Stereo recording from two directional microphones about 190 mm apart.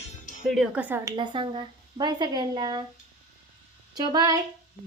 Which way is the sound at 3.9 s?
20° right (ahead or behind).